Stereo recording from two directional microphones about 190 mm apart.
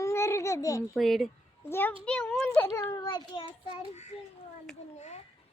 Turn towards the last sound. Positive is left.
turn(degrees=35)  # may be behind; listen again after turning